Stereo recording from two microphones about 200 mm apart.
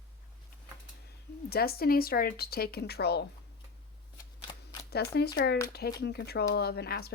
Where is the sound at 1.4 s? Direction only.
50° left (ahead or behind).